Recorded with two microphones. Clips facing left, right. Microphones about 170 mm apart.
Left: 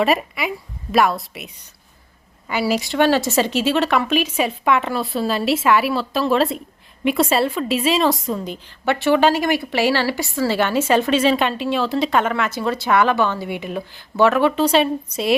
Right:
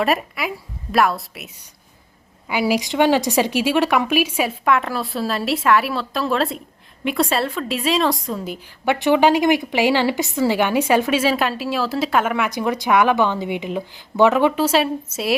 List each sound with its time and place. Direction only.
0.0 s a woman's voice: centre (ahead or behind)
2.5 s a woman's voice: 15° right (ahead or behind)
8.8 s a woman's voice: 15° right (ahead or behind)
14.6 s a woman's voice: 5° right (ahead or behind)